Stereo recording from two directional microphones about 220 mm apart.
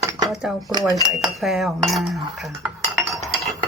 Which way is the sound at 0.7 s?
20° right (ahead or behind).